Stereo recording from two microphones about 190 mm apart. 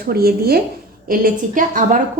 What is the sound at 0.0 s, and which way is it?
A woman's voice, 55° right (ahead or behind).